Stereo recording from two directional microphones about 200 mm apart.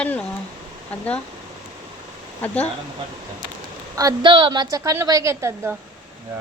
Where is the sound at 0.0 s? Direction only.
5° left (ahead or behind).